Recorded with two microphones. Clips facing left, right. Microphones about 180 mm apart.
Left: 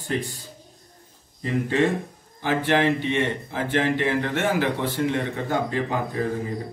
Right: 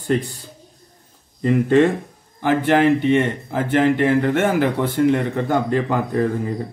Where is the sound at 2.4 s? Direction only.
50° right (ahead or behind).